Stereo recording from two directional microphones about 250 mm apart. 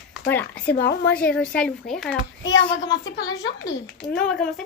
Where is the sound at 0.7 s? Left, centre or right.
Left.